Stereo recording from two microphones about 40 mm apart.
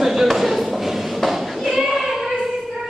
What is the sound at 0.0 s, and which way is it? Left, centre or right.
Chop, centre.